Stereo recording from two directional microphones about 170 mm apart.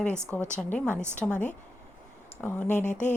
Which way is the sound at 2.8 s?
45° left (ahead or behind).